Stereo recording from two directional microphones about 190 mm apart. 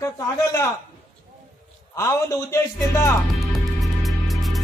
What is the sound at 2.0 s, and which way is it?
A man's voice, 15° left (ahead or behind).